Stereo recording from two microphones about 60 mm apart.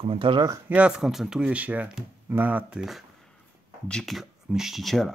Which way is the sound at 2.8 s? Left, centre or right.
Centre.